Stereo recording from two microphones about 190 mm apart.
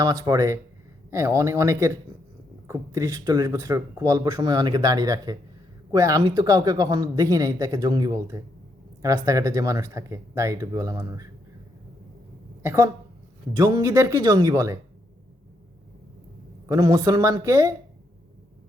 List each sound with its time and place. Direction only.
0.0 s speech: 20° right (ahead or behind)
12.6 s speech: 15° right (ahead or behind)
16.6 s speech: 20° right (ahead or behind)